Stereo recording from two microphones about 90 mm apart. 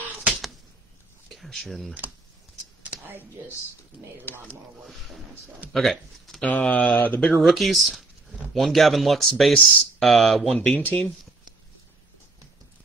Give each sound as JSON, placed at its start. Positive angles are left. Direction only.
{"t": 1.3, "sound": "speech", "side_deg": 0}
{"t": 2.8, "sound": "a sound", "side_deg": -20}
{"t": 4.3, "sound": "speech", "side_deg": 20}
{"t": 5.7, "sound": "speech", "side_deg": 0}
{"t": 6.4, "sound": "speech", "side_deg": 15}
{"t": 7.4, "sound": "speech", "side_deg": 0}